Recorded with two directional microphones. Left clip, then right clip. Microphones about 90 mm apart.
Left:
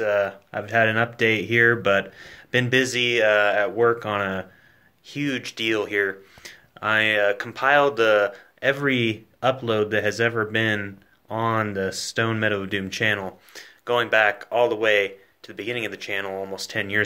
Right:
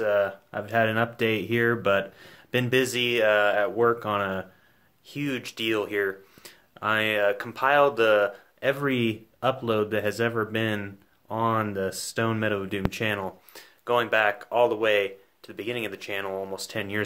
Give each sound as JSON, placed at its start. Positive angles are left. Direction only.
{"t": 0.0, "sound": "speech", "side_deg": -35}